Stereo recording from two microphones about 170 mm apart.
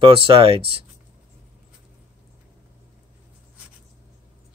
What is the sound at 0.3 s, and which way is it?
Speech, 35° right (ahead or behind).